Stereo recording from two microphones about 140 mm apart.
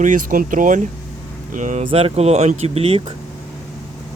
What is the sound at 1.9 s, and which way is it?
Speech, 45° right (ahead or behind).